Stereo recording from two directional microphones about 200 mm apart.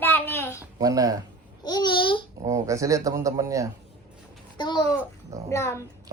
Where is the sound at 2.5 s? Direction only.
15° right (ahead or behind).